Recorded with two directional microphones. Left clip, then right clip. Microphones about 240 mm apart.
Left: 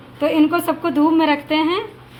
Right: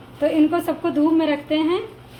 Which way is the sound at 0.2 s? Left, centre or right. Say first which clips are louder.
Left 2 dB; left.